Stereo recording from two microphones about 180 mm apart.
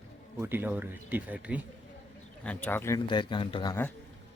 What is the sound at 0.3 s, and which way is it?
Speech, 10° right (ahead or behind).